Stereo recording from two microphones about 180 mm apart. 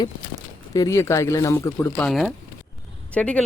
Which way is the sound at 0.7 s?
20° left (ahead or behind).